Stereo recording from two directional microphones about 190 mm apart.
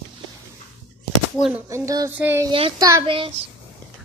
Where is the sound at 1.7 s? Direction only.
15° right (ahead or behind).